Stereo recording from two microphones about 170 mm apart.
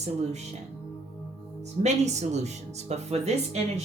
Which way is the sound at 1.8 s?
40° right (ahead or behind).